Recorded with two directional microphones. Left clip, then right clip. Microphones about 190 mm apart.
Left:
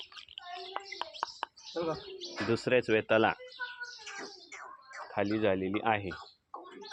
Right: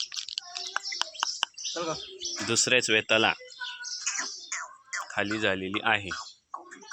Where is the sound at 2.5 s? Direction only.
10° right (ahead or behind).